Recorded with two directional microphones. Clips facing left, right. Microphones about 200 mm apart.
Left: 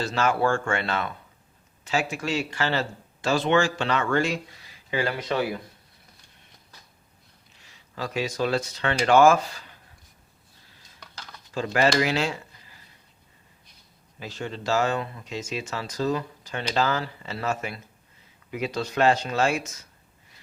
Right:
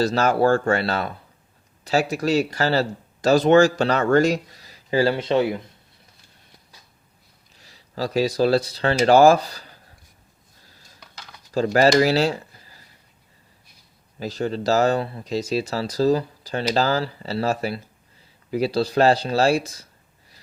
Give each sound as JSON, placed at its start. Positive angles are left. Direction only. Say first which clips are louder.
{"t": 0.0, "sound": "speech", "louder": "right 5 dB", "side_deg": -40}
{"t": 7.5, "sound": "speech", "louder": "right 7 dB", "side_deg": -35}
{"t": 11.0, "sound": "a sound", "louder": "left 1 dB", "side_deg": -10}
{"t": 11.5, "sound": "speech", "louder": "right 6 dB", "side_deg": -40}
{"t": 14.2, "sound": "speech", "louder": "right 8 dB", "side_deg": -40}